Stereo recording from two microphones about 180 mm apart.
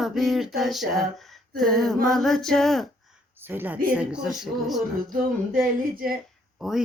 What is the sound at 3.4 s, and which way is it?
Speech, 10° right (ahead or behind).